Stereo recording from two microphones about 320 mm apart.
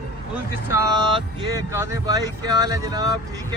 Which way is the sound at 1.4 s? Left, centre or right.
Centre.